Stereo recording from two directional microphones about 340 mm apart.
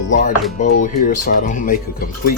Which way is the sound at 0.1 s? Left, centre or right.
Left.